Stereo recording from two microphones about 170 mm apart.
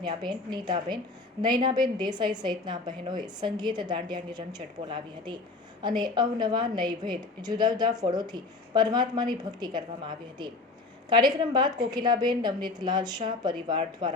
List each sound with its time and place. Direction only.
0.0 s a woman's voice: 25° right (ahead or behind)